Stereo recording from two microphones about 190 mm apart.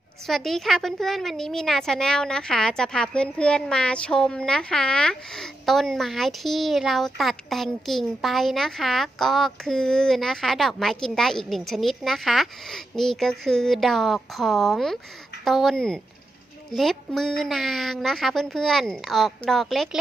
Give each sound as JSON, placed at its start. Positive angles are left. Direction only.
{"t": 0.3, "sound": "a woman's voice", "side_deg": 0}